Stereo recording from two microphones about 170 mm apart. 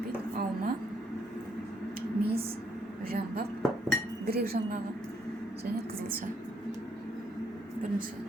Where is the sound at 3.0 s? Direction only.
60° right (ahead or behind).